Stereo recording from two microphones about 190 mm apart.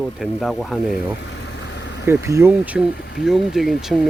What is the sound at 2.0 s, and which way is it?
Speech, 15° right (ahead or behind).